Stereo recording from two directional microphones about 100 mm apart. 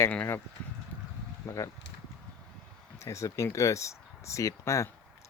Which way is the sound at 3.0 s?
30° left (ahead or behind).